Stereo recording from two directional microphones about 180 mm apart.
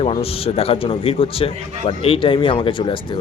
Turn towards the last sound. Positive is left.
turn(degrees=25)  # may be behind; listen again after turning